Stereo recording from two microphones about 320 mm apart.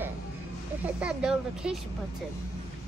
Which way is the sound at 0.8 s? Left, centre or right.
Centre.